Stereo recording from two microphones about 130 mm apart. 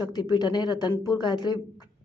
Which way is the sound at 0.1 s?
35° left (ahead or behind).